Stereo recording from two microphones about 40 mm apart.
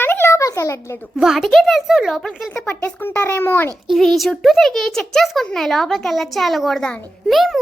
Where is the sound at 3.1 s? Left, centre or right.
Left.